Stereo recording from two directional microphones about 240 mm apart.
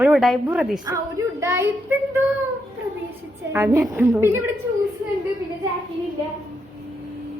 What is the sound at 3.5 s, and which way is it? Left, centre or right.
Speech, centre.